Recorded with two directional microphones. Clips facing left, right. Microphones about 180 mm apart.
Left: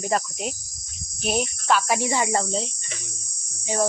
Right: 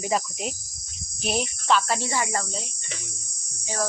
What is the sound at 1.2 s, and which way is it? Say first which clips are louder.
Cricket: left 2 dB; centre (ahead or behind).